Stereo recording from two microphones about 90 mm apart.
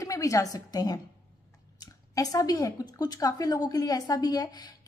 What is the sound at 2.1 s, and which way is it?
A woman's voice, 45° left (ahead or behind).